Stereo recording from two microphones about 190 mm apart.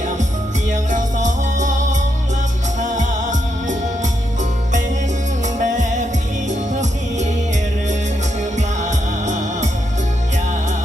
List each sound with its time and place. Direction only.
0.7 s music: 40° right (ahead or behind)
5.6 s music: 40° right (ahead or behind)
8.5 s music: 40° right (ahead or behind)